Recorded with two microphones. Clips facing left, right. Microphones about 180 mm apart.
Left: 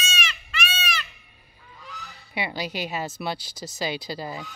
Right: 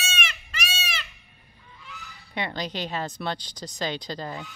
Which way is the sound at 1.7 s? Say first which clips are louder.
Left 3 dB; 40° left (ahead or behind).